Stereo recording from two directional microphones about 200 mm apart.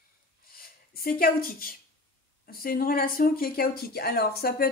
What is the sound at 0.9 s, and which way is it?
Speech, 45° left (ahead or behind).